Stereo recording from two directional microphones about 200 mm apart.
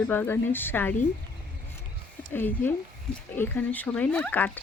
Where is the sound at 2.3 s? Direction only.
10° left (ahead or behind).